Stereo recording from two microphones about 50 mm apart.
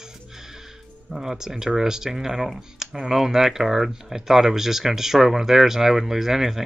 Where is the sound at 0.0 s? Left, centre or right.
Centre.